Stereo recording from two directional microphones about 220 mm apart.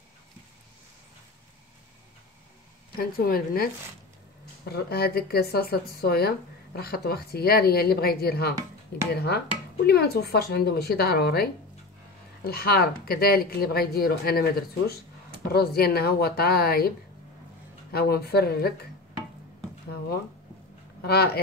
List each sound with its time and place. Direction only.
3.0 s speech: 40° left (ahead or behind)
15.5 s speech: 45° left (ahead or behind)
17.9 s speech: 45° left (ahead or behind)
21.0 s speech: 45° left (ahead or behind)